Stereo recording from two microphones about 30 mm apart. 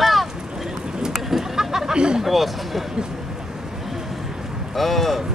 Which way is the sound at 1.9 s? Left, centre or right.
Right.